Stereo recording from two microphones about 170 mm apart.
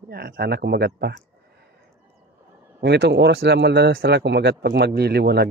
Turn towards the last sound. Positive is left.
turn(degrees=-75)  # may be behind; listen again after turning